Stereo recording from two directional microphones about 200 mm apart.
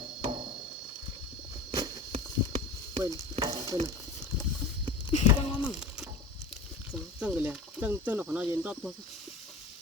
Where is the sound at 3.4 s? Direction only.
15° right (ahead or behind).